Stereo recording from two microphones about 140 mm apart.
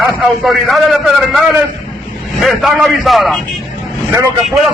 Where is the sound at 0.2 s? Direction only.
Centre (ahead or behind).